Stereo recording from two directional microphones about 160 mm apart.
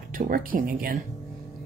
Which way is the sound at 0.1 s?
60° right (ahead or behind).